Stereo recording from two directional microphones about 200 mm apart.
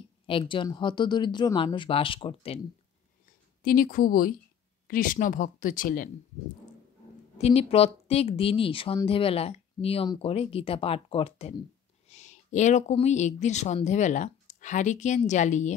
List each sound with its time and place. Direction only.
0.3 s a woman's voice: 25° left (ahead or behind)
3.6 s speech: 45° left (ahead or behind)
7.3 s a woman's voice: 30° left (ahead or behind)